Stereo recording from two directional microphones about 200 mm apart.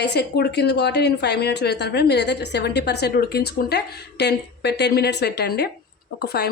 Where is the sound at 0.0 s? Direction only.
55° left (ahead or behind).